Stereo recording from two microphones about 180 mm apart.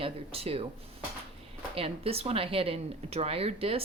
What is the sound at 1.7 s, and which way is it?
Speech, 30° right (ahead or behind).